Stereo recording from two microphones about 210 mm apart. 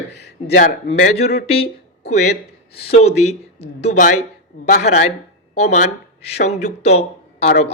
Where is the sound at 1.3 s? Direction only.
30° left (ahead or behind).